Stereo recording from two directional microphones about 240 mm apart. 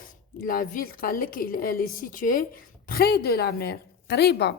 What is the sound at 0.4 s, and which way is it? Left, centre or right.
A woman's voice, left.